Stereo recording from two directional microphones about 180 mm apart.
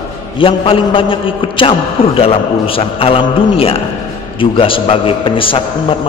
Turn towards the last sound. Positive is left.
turn(degrees=30)  # may be behind; listen again after turning